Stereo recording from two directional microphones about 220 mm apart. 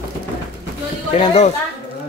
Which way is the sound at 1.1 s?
30° left (ahead or behind).